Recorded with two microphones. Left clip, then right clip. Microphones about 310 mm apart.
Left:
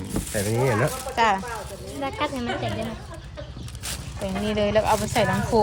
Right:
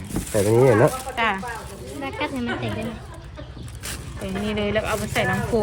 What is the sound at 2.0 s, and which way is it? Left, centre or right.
Speech, left.